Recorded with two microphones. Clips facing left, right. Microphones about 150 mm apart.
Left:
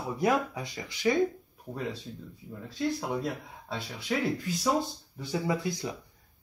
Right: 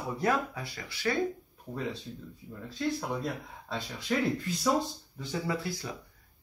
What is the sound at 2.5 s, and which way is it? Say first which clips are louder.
Speech: left 1 dB; 5° left (ahead or behind).